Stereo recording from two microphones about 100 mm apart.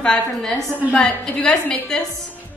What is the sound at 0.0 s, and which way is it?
A woman's voice, 5° left (ahead or behind).